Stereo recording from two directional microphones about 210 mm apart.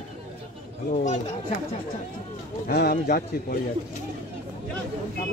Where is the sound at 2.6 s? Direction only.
45° left (ahead or behind).